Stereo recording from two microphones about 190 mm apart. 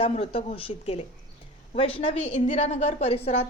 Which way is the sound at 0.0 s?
30° left (ahead or behind).